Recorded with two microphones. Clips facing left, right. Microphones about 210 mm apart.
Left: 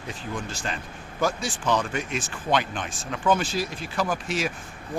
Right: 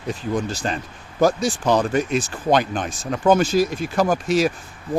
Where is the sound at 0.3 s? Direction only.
40° right (ahead or behind).